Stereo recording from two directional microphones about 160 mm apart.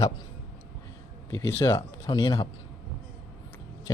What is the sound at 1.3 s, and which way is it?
Speech, 15° left (ahead or behind).